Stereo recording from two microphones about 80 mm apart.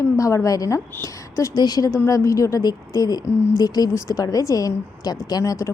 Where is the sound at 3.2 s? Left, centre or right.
Left.